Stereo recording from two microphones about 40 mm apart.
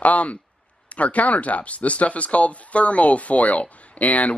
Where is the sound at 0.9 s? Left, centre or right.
Left.